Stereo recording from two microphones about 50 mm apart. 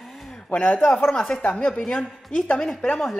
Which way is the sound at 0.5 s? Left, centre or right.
Left.